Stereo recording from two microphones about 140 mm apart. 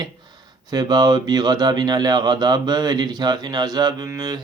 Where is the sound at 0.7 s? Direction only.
30° right (ahead or behind).